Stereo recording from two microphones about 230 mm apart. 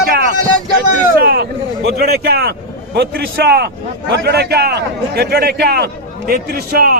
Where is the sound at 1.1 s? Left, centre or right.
Right.